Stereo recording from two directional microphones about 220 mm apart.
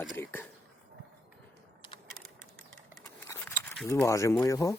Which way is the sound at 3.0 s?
10° left (ahead or behind).